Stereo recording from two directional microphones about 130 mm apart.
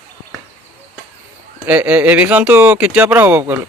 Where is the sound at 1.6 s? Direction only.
10° right (ahead or behind).